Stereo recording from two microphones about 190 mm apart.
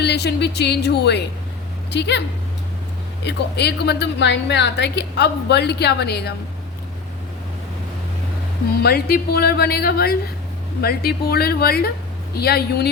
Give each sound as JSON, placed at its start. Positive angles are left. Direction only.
{"t": 0.0, "sound": "a woman's voice", "side_deg": 60}
{"t": 3.2, "sound": "a woman's voice", "side_deg": 60}
{"t": 8.8, "sound": "a woman's voice", "side_deg": 55}